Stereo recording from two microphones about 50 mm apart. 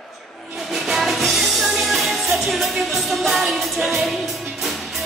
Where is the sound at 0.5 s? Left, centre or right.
Centre.